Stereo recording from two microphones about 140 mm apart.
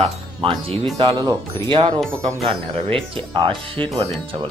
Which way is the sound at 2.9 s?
40° right (ahead or behind).